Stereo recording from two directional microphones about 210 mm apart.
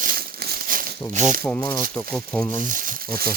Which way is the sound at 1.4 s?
5° left (ahead or behind).